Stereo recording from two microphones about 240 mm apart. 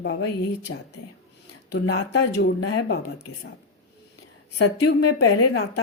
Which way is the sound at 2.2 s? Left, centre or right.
Left.